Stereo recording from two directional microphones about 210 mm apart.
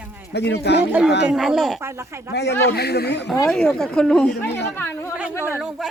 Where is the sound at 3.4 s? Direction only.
5° left (ahead or behind).